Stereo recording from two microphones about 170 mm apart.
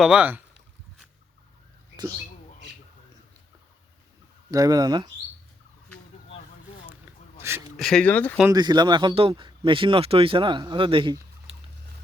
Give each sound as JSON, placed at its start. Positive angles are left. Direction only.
{"t": 0.0, "sound": "speech", "side_deg": -5}
{"t": 4.5, "sound": "speech", "side_deg": -20}
{"t": 6.9, "sound": "a sound", "side_deg": -15}
{"t": 7.8, "sound": "speech", "side_deg": 5}
{"t": 8.5, "sound": "speech", "side_deg": -25}